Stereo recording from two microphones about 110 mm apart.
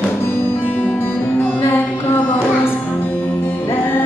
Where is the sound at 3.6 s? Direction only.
20° left (ahead or behind).